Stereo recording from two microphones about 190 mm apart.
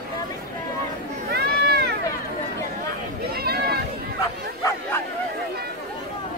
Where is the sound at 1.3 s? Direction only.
55° right (ahead or behind).